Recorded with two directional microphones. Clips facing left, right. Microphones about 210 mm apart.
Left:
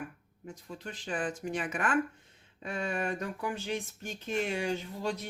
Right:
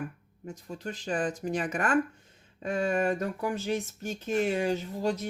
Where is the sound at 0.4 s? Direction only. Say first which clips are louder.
Right 5 dB; 40° right (ahead or behind).